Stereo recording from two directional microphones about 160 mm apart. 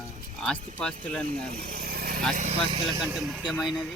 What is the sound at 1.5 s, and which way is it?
Speech, 70° right (ahead or behind).